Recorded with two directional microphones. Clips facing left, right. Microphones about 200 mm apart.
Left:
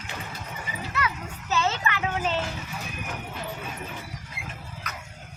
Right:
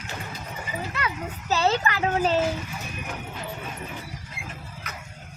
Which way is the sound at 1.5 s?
35° right (ahead or behind).